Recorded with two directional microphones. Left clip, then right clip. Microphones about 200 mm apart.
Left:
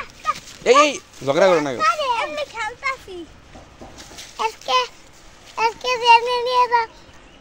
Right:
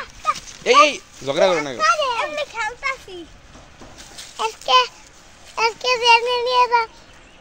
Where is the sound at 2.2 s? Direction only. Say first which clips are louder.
Right 1 dB; 5° left (ahead or behind).